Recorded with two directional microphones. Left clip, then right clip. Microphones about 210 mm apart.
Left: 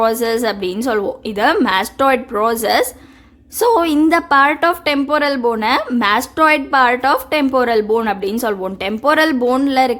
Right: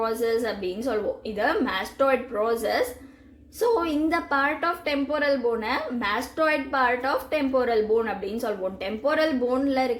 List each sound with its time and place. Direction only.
0.0 s a woman's voice: 40° left (ahead or behind)